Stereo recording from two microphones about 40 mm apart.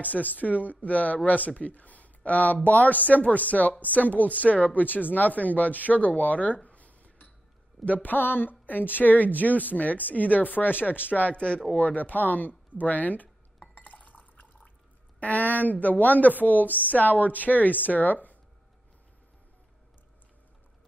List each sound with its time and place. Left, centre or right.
0.0 s speech: left
11.3 s speech: left
11.8 s speech: left
14.0 s drip: left
15.1 s speech: left